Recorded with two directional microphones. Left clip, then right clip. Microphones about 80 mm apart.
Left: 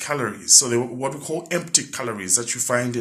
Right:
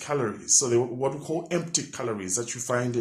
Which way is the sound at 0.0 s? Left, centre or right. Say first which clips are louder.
Left 3 dB; centre.